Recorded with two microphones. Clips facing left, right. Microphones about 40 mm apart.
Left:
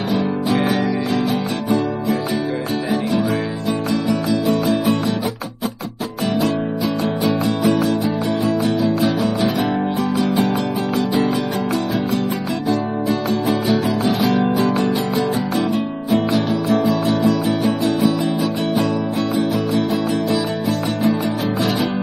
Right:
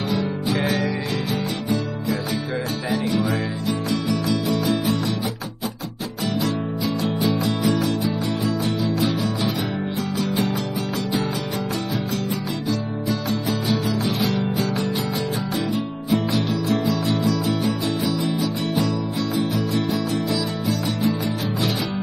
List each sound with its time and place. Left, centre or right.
7.0 s music: left
13.7 s music: left
16.3 s music: left